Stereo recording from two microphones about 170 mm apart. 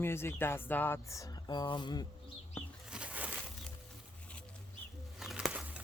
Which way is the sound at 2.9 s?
5° right (ahead or behind).